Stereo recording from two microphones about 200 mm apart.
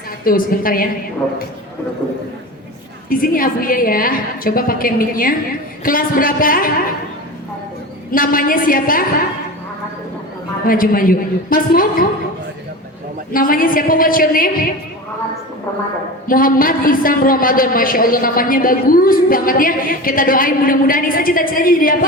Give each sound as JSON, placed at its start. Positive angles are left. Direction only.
{"t": 0.3, "sound": "a woman's voice", "side_deg": 45}
{"t": 3.1, "sound": "a woman's voice", "side_deg": 45}
{"t": 8.1, "sound": "a woman's voice", "side_deg": 45}
{"t": 10.7, "sound": "a woman's voice", "side_deg": 45}
{"t": 13.3, "sound": "a woman's voice", "side_deg": 45}
{"t": 16.2, "sound": "a woman's voice", "side_deg": 45}